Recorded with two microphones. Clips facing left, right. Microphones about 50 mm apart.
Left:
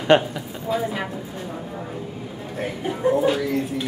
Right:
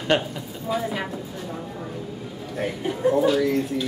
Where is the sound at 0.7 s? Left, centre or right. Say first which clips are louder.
Left 2 dB; centre.